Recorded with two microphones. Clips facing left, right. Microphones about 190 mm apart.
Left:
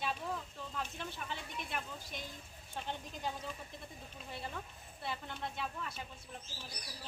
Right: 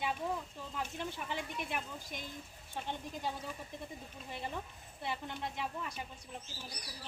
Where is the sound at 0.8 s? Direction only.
15° right (ahead or behind).